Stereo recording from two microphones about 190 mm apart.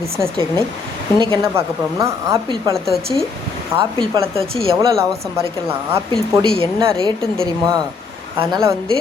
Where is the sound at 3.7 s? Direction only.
10° right (ahead or behind).